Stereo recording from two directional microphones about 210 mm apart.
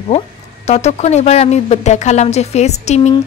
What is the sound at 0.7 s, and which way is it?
A woman's voice, 30° left (ahead or behind).